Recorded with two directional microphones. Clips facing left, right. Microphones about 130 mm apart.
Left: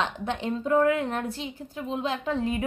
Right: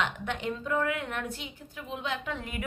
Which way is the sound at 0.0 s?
30° left (ahead or behind).